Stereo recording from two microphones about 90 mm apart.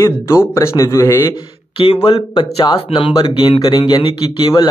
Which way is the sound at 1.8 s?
90° left.